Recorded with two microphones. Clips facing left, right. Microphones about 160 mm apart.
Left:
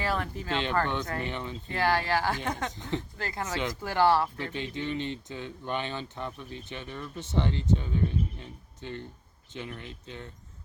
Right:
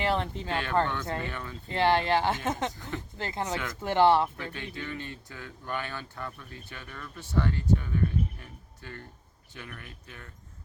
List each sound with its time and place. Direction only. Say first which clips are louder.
0.0 s speech: right 2 dB; 25° right (ahead or behind)
0.5 s speech: even; 20° left (ahead or behind)
1.7 s speech: right 3 dB; 25° right (ahead or behind)
2.7 s speech: left 4 dB; 20° left (ahead or behind)
3.2 s speech: even; 20° right (ahead or behind)
4.5 s speech: left 5 dB; 20° left (ahead or behind)